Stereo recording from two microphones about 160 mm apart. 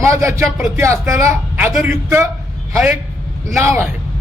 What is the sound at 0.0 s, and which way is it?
Speech, 20° right (ahead or behind).